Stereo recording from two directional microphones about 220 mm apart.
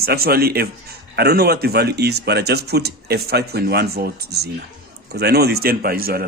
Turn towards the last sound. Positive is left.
turn(degrees=-45)  # may be behind; listen again after turning